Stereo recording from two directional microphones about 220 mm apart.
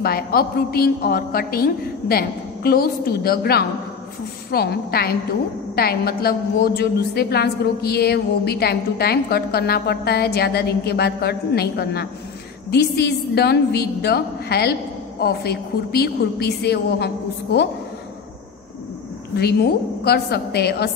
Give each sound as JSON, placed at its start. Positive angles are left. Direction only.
{"t": 0.0, "sound": "a woman's voice", "side_deg": 45}
{"t": 19.4, "sound": "a woman's voice", "side_deg": 45}